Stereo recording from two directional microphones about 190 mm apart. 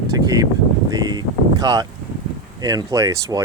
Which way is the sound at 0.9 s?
20° right (ahead or behind).